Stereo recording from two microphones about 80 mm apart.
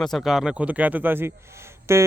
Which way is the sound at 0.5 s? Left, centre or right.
Centre.